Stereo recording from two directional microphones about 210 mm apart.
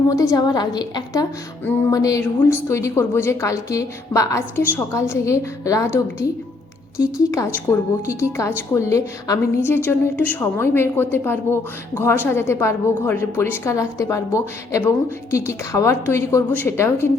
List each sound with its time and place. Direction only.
0.1 s a woman's voice: 15° left (ahead or behind)
7.0 s a woman's voice: 15° left (ahead or behind)